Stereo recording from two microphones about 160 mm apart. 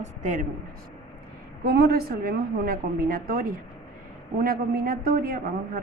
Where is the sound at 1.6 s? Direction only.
85° right.